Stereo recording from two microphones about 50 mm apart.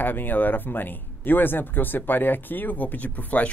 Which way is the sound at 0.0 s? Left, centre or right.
Left.